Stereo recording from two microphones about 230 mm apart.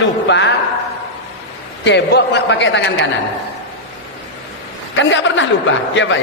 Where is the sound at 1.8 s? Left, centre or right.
Left.